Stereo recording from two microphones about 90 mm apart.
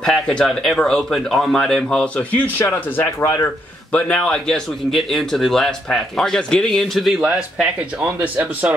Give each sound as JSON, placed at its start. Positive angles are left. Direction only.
{"t": 0.0, "sound": "speech", "side_deg": 5}
{"t": 2.7, "sound": "speech", "side_deg": 30}
{"t": 3.9, "sound": "speech", "side_deg": 15}